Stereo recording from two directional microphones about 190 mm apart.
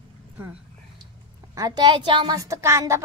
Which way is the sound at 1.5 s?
20° right (ahead or behind).